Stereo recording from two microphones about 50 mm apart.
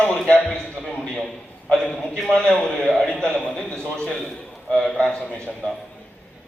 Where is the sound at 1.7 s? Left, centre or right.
Centre.